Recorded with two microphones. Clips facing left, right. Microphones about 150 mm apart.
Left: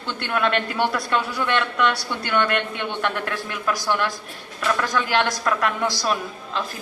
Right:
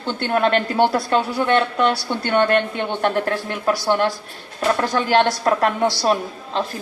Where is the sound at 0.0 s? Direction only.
30° right (ahead or behind).